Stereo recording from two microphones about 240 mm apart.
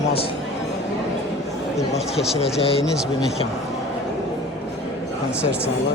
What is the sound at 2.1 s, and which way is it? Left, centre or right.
Speech, centre.